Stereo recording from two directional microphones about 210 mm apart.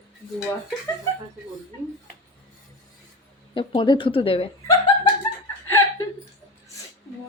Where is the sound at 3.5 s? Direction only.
25° left (ahead or behind).